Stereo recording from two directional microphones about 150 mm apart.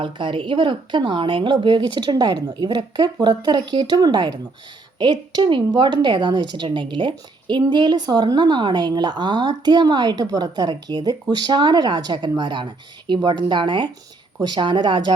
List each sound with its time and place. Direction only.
0.0 s a woman's voice: 35° right (ahead or behind)